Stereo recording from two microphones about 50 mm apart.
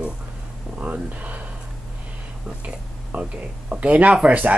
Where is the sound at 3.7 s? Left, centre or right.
Right.